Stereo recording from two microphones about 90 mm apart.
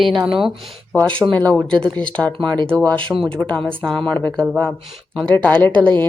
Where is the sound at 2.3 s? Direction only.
60° right (ahead or behind).